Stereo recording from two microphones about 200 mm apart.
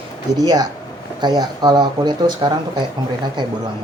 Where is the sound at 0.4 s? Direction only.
20° right (ahead or behind).